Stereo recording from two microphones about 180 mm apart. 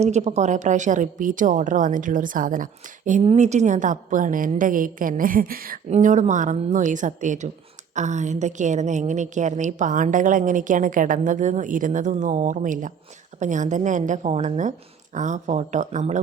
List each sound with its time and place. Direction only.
0.0 s a woman's voice: 35° right (ahead or behind); by 5.8 s 55° right (ahead or behind)
5.9 s a woman's voice: 45° right (ahead or behind)